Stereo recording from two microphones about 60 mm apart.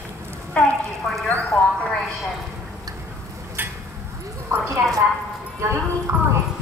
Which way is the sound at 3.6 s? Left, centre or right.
Right.